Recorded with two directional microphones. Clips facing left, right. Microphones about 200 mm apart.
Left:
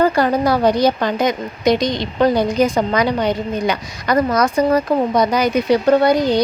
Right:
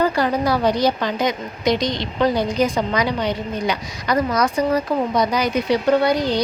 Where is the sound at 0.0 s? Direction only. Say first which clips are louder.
Left 4 dB; 50° left (ahead or behind).